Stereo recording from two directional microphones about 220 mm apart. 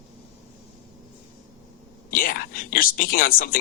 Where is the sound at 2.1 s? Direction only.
40° left (ahead or behind).